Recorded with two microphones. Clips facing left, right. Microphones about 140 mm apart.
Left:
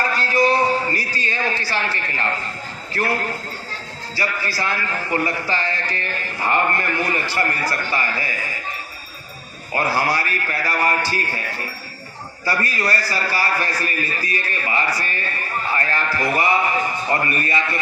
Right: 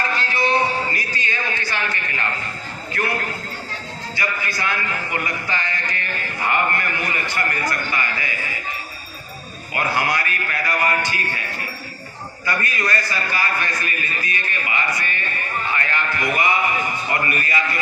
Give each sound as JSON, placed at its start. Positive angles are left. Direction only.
{"t": 0.0, "sound": "a sound", "side_deg": 40}
{"t": 2.9, "sound": "a man's voice", "side_deg": 30}
{"t": 9.7, "sound": "a man's voice", "side_deg": 35}
{"t": 12.5, "sound": "a man's voice", "side_deg": 35}